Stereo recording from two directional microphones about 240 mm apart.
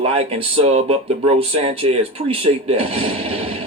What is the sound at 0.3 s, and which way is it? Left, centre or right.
Speech, right.